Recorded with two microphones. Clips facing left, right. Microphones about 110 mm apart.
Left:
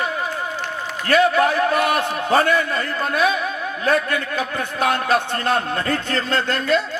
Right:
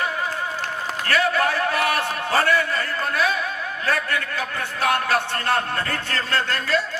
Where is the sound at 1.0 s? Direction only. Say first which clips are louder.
Left 5 dB; 20° left (ahead or behind).